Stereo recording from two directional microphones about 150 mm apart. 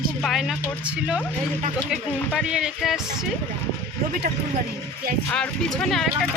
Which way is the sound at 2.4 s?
5° right (ahead or behind).